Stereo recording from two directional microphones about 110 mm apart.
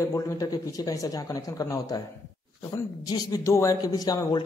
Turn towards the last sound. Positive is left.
turn(degrees=35)  # may be behind; listen again after turning